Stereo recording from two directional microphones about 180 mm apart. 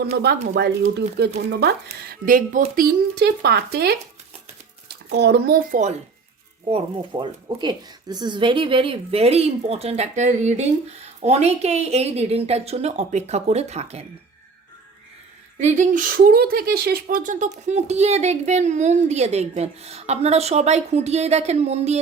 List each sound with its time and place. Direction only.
0.0 s speech: 65° right (ahead or behind)
6.7 s speech: 30° right (ahead or behind)
15.5 s speech: 40° right (ahead or behind)